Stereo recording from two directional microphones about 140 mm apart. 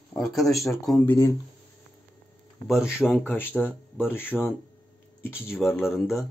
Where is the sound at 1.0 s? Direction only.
15° left (ahead or behind).